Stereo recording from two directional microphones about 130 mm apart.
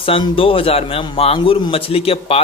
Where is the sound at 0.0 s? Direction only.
45° left (ahead or behind).